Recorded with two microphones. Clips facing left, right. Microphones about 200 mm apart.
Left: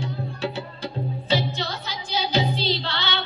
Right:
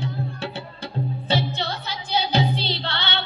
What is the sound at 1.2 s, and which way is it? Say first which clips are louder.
Music: left 1 dB; 60° right (ahead or behind).